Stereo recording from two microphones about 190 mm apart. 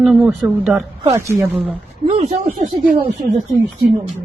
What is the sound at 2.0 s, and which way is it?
Speech, 30° right (ahead or behind).